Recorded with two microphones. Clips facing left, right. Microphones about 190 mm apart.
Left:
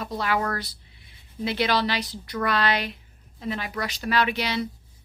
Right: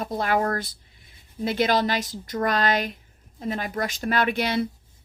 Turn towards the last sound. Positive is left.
turn(degrees=-50)  # may be behind; listen again after turning